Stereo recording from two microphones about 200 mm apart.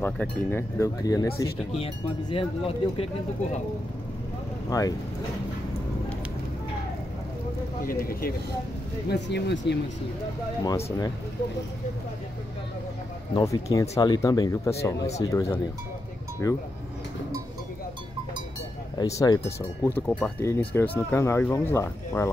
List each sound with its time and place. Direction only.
0.0 s speech: 10° left (ahead or behind)
1.8 s speech: 25° left (ahead or behind)
4.6 s speech: 20° left (ahead or behind)
7.8 s speech: 45° left (ahead or behind)
9.1 s speech: 60° left (ahead or behind)
13.3 s speech: 15° left (ahead or behind)
16.4 s speech: 15° left (ahead or behind)
18.9 s speech: 15° left (ahead or behind)